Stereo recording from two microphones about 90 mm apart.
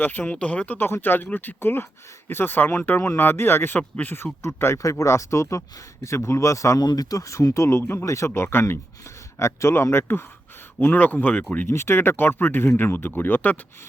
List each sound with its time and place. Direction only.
0.0 s speech: 20° left (ahead or behind); by 6.8 s 35° left (ahead or behind)
6.8 s speech: 45° left (ahead or behind); by 11.7 s 20° left (ahead or behind)
11.7 s speech: 30° left (ahead or behind)